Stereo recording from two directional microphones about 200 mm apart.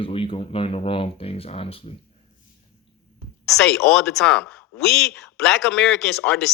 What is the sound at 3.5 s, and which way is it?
Speech, centre (ahead or behind).